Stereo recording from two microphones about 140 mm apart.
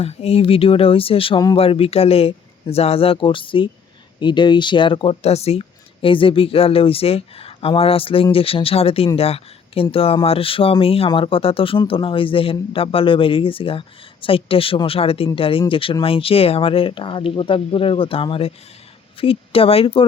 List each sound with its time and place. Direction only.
0.0 s speech: 45° left (ahead or behind)